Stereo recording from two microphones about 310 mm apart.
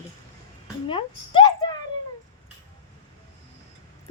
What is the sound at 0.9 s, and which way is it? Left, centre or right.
Speech, centre.